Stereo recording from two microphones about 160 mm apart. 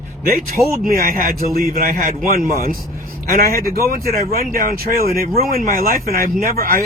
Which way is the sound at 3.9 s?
65° right (ahead or behind).